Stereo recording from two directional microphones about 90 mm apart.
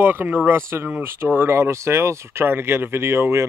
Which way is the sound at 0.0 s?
20° right (ahead or behind).